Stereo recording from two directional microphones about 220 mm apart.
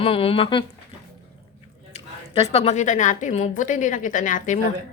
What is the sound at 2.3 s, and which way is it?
A woman's voice, 25° left (ahead or behind).